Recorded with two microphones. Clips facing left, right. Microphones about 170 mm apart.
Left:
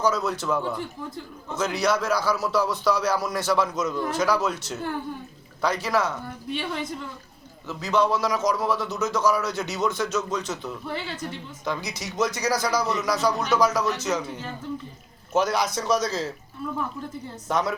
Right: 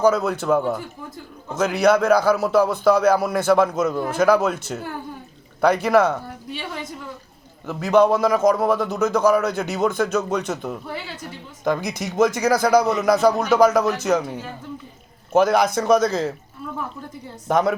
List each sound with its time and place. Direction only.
0.0 s a man's voice: 55° right (ahead or behind)
7.7 s a man's voice: 55° right (ahead or behind)
15.3 s a man's voice: 55° right (ahead or behind)
17.5 s a man's voice: 50° right (ahead or behind)